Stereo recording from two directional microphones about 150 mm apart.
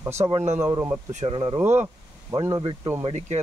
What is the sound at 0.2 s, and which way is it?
Speech, 30° right (ahead or behind).